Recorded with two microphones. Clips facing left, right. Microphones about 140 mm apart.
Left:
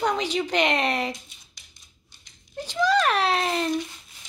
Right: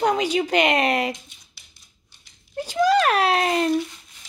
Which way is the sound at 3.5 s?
5° right (ahead or behind).